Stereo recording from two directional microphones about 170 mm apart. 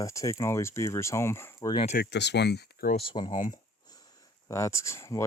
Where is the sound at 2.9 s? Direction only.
30° left (ahead or behind).